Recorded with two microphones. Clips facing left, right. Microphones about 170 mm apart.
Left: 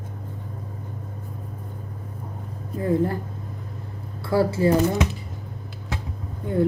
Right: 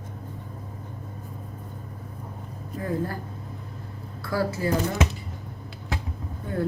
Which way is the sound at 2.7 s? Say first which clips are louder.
Left 7 dB; 25° left (ahead or behind).